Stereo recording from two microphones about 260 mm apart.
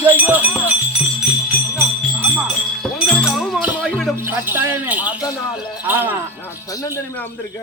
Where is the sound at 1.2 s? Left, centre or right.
Centre.